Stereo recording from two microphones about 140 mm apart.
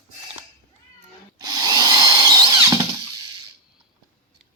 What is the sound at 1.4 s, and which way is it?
Drill, 30° right (ahead or behind).